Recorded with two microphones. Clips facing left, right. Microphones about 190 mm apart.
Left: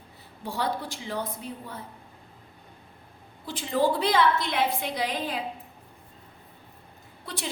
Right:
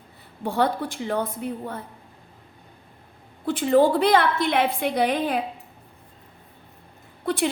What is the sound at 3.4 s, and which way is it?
A woman's voice, 55° right (ahead or behind).